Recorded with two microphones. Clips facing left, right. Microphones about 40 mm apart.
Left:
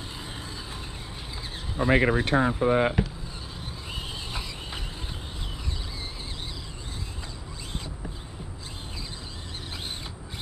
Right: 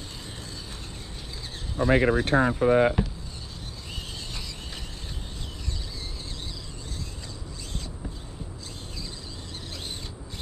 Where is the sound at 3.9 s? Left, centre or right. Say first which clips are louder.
Left 3 dB; centre.